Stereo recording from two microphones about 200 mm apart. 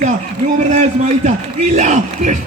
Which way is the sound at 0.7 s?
35° right (ahead or behind).